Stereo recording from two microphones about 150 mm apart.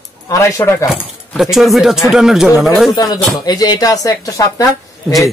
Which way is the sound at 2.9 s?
25° left (ahead or behind).